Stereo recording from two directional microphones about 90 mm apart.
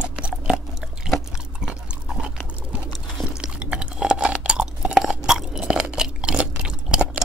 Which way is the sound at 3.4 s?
10° right (ahead or behind).